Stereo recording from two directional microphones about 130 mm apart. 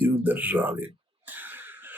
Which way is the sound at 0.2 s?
15° right (ahead or behind).